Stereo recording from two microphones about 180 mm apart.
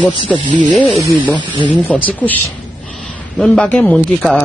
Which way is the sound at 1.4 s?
25° right (ahead or behind).